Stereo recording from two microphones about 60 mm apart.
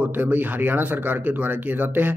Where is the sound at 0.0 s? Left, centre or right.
Right.